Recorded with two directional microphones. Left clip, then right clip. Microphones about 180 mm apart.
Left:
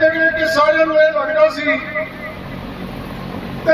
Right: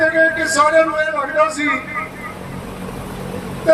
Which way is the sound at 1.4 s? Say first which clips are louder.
Left 2 dB; 65° right (ahead or behind).